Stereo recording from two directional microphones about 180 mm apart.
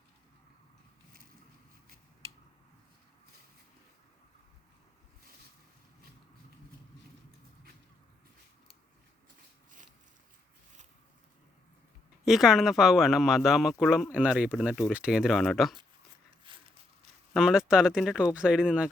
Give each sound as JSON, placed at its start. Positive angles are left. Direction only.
{"t": 12.2, "sound": "speech", "side_deg": 0}
{"t": 16.4, "sound": "a sound", "side_deg": -30}
{"t": 17.3, "sound": "speech", "side_deg": -5}